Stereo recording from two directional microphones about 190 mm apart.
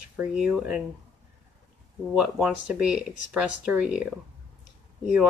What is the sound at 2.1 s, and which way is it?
Speech, 5° right (ahead or behind).